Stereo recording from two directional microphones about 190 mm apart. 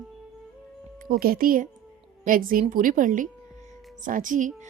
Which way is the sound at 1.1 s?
50° right (ahead or behind).